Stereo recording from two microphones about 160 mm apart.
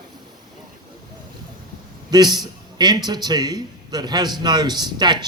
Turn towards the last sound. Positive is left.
turn(degrees=-25)  # may be behind; listen again after turning